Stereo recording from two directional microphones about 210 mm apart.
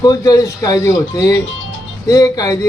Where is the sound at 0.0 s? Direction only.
15° left (ahead or behind).